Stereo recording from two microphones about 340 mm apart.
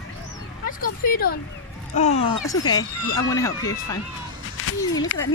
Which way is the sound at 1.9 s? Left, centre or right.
Centre.